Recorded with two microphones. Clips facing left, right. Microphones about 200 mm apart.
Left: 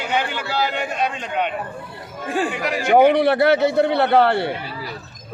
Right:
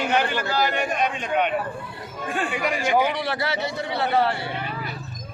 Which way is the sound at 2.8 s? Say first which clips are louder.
Left 11 dB; 55° left (ahead or behind).